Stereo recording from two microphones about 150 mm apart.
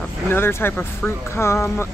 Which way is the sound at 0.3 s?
15° left (ahead or behind).